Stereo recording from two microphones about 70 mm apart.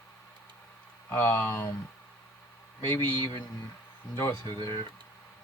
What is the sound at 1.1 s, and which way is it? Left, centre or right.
Speech, left.